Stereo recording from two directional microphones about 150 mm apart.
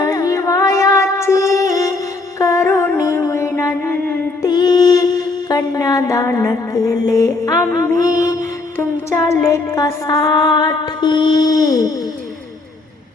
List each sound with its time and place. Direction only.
0.0 s child singing: 20° left (ahead or behind)
2.4 s music: 20° left (ahead or behind)
4.4 s a sound: 25° left (ahead or behind)